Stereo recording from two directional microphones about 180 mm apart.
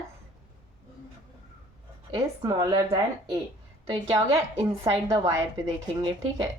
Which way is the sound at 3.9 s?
30° right (ahead or behind).